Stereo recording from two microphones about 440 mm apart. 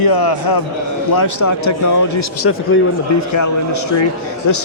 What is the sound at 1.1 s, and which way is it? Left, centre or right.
Speech, left.